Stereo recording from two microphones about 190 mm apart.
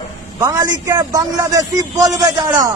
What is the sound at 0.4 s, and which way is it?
A man's voice, 15° right (ahead or behind).